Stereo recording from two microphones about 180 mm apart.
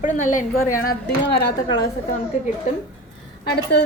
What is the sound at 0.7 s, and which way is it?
Speech, 60° left (ahead or behind).